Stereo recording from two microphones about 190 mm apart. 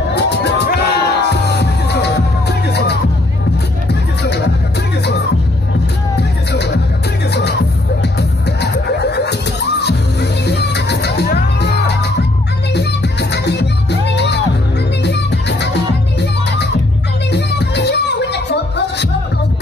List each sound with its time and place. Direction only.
0.1 s music: 65° left (ahead or behind)
6.5 s music: 65° left (ahead or behind)